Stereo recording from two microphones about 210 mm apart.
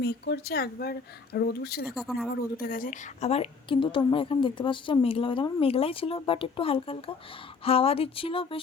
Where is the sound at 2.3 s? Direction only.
45° left (ahead or behind).